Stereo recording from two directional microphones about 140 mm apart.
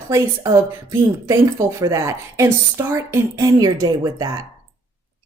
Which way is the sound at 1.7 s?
25° right (ahead or behind).